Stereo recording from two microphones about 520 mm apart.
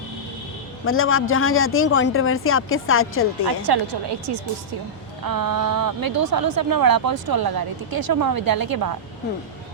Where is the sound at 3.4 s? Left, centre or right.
Right.